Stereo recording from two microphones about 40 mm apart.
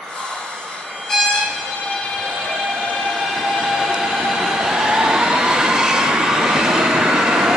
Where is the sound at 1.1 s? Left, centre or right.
Centre.